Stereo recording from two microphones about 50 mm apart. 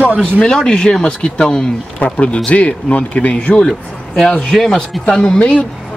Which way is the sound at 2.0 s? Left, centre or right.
Left.